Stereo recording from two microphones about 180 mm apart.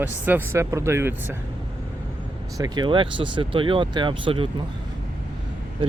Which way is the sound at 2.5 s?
20° right (ahead or behind).